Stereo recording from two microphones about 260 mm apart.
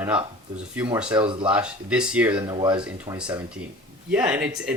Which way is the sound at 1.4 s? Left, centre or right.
Centre.